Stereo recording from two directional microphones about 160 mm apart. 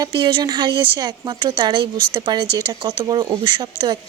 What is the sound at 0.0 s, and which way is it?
Speech, 30° right (ahead or behind).